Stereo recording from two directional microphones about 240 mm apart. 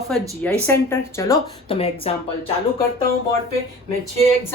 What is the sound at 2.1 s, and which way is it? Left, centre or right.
Speech, left.